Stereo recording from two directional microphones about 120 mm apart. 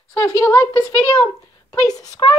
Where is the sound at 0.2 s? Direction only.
20° left (ahead or behind).